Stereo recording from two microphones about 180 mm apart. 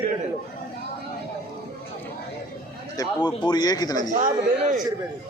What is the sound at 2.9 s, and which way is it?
A man's voice, 20° left (ahead or behind).